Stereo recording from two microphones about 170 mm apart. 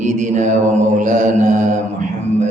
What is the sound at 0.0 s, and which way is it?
Mantra, 45° right (ahead or behind).